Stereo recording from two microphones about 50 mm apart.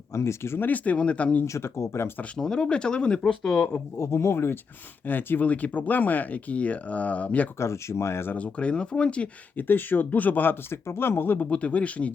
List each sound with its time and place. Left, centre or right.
0.1 s speech: left
0.6 s speech: left
1.5 s speech: left
2.4 s speech: centre
3.9 s speech: left
5.0 s speech: left
7.6 s speech: left
8.4 s speech: left
9.6 s speech: left
10.8 s speech: left
11.4 s speech: left